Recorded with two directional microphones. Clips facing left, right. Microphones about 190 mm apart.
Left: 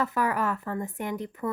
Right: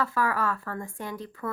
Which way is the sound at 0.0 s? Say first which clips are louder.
Left 1 dB; 20° left (ahead or behind).